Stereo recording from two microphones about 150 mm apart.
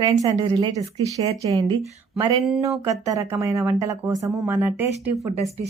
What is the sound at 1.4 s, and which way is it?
Speech, 25° right (ahead or behind).